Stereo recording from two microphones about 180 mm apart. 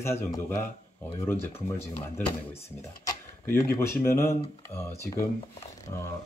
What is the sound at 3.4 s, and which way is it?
Speech, 10° left (ahead or behind).